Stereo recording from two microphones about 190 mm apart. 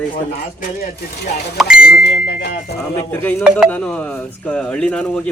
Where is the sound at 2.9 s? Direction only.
10° left (ahead or behind).